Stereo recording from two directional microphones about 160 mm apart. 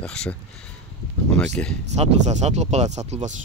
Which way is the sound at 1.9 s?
45° right (ahead or behind).